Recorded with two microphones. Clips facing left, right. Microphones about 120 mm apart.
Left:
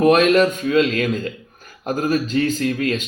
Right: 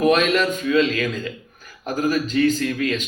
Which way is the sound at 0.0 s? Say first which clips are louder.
Left 4 dB; 40° left (ahead or behind).